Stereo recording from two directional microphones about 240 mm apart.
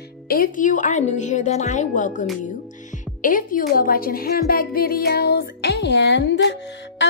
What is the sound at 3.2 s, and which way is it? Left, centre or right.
A woman's voice, left.